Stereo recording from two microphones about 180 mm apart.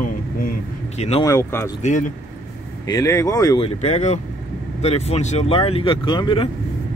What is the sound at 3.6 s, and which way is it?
Speech, 35° left (ahead or behind).